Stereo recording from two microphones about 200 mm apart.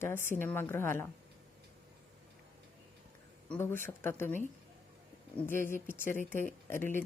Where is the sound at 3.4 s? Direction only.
10° left (ahead or behind).